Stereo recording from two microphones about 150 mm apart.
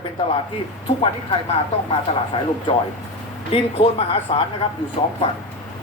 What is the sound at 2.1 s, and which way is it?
Speech, 40° left (ahead or behind).